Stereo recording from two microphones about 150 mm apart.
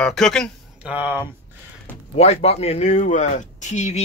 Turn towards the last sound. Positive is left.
turn(degrees=50)  # may be behind; listen again after turning